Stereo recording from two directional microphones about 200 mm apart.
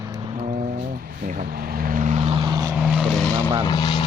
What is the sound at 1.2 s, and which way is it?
Vehicle, 45° right (ahead or behind).